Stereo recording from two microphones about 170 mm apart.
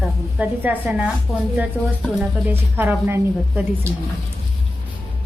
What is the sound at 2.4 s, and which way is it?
A woman's voice, 10° right (ahead or behind).